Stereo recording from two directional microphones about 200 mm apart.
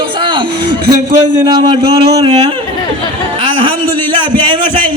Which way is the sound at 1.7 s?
30° right (ahead or behind).